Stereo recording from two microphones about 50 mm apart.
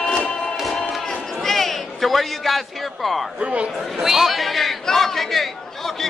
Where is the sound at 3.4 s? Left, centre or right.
Right.